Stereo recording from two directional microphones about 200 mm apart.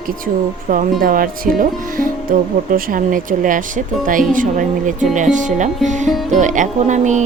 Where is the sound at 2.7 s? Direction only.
40° right (ahead or behind).